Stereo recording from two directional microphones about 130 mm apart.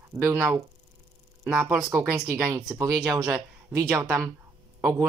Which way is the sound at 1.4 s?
5° right (ahead or behind).